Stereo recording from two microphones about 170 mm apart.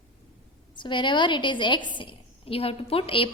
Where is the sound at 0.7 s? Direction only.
30° left (ahead or behind).